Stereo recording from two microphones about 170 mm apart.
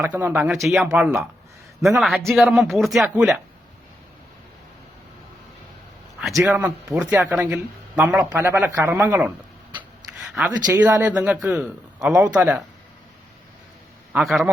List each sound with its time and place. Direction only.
0.0 s speech: 10° right (ahead or behind)
0.5 s a woman's voice: centre (ahead or behind)
6.4 s speech: 10° right (ahead or behind)
9.7 s a sound: 10° right (ahead or behind)
10.7 s speech: 10° right (ahead or behind)
14.1 s a woman's voice: centre (ahead or behind)